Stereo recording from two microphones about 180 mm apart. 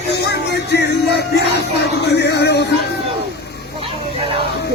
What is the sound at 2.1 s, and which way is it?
Music, 70° left (ahead or behind).